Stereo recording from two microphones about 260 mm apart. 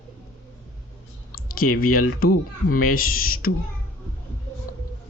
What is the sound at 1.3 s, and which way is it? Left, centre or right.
Speech, left.